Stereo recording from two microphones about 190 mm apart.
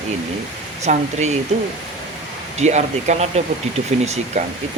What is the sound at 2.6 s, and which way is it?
Speech, 35° right (ahead or behind).